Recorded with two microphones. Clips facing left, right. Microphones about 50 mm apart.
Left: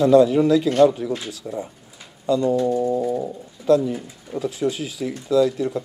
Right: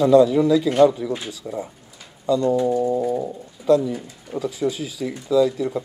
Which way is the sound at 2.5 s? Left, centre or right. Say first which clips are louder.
Even; centre.